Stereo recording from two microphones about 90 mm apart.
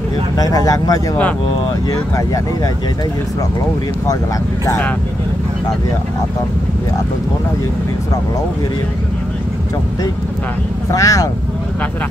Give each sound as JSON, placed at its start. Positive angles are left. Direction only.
{"t": 0.4, "sound": "speech", "side_deg": 45}
{"t": 10.9, "sound": "speech", "side_deg": 40}